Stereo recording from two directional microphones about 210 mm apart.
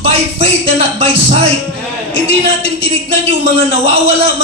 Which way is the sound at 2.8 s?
25° right (ahead or behind).